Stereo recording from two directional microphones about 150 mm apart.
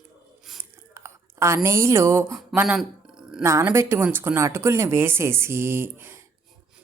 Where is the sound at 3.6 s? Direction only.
20° right (ahead or behind).